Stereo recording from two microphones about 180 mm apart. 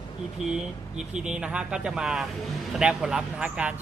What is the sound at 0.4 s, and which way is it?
Speech, 5° right (ahead or behind).